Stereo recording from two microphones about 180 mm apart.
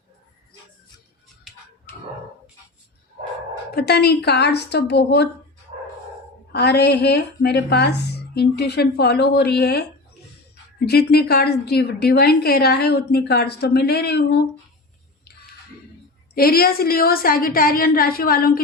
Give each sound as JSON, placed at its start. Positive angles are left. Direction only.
{"t": 3.8, "sound": "a woman's voice", "side_deg": 65}
{"t": 6.5, "sound": "a woman's voice", "side_deg": 65}
{"t": 10.8, "sound": "a woman's voice", "side_deg": 65}
{"t": 16.3, "sound": "a woman's voice", "side_deg": 55}